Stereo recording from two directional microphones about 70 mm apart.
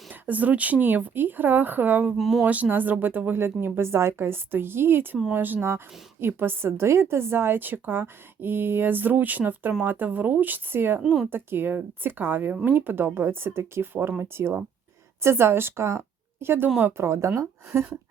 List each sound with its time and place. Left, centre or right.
0.1 s speech: right
2.1 s speech: centre
2.4 s a woman's voice: right
11.0 s speech: centre
11.3 s a woman's voice: right